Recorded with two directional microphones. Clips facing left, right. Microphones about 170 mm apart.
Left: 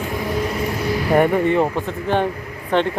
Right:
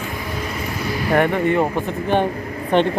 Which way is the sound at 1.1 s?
10° left (ahead or behind).